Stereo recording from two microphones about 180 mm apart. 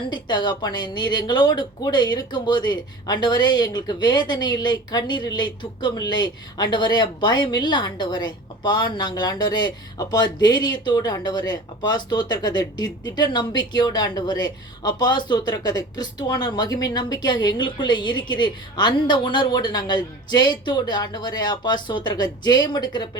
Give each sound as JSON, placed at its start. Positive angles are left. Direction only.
{"t": 0.1, "sound": "speech", "side_deg": 25}